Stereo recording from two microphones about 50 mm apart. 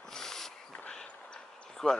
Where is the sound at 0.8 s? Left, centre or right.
Centre.